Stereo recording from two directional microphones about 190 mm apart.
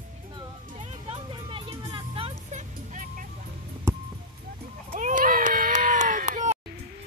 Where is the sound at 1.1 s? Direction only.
25° right (ahead or behind).